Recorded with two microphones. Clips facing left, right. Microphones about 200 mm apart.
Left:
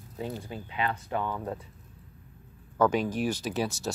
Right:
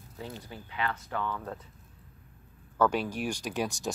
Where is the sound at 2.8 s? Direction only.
10° right (ahead or behind).